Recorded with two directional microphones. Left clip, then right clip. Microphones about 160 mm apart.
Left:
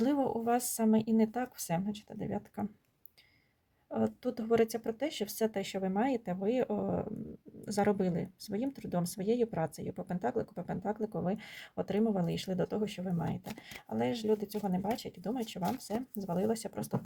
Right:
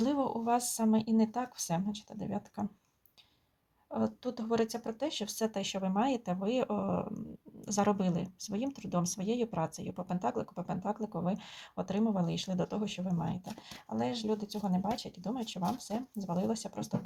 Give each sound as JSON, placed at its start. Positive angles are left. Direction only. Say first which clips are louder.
{"t": 0.0, "sound": "a sound", "louder": "left 1 dB", "side_deg": 45}
{"t": 0.4, "sound": "speech", "louder": "even", "side_deg": 45}
{"t": 3.9, "sound": "speech", "louder": "left 1 dB", "side_deg": 45}